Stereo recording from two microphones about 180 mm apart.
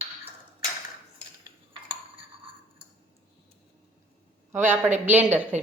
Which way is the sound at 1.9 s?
30° right (ahead or behind).